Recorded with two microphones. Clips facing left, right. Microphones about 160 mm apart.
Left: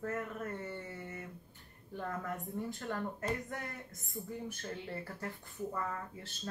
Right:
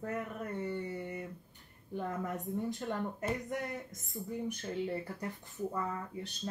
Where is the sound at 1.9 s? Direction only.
20° right (ahead or behind).